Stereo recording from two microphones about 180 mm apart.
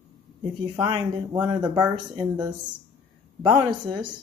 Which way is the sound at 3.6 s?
25° right (ahead or behind).